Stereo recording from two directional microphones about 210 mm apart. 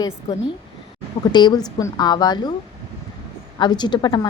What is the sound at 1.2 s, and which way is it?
A woman's voice, 20° left (ahead or behind).